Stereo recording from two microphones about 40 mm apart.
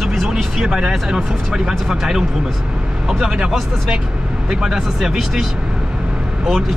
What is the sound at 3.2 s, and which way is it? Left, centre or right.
Speech, right.